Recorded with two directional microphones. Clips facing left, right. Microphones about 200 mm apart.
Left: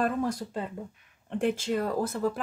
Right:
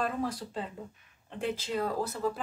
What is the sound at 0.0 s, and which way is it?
Speech, 45° left (ahead or behind).